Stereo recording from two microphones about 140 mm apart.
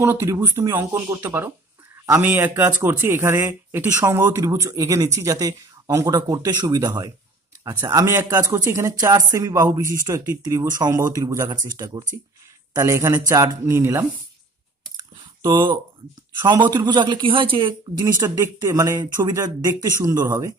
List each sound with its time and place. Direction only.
0.0 s speech: 20° right (ahead or behind)
15.4 s speech: 35° right (ahead or behind)
18.0 s speech: 20° right (ahead or behind)